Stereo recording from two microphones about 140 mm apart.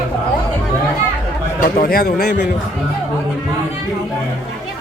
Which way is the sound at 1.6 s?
85° left.